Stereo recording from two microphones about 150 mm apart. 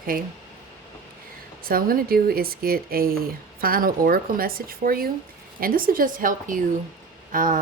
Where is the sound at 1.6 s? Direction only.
75° right (ahead or behind).